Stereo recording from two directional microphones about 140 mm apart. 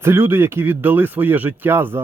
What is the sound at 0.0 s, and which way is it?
Speech, 15° right (ahead or behind).